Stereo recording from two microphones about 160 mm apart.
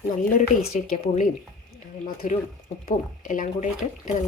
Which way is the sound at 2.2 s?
55° left (ahead or behind).